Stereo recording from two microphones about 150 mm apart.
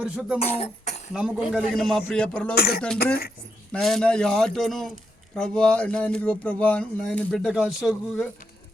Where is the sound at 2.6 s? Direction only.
90° left.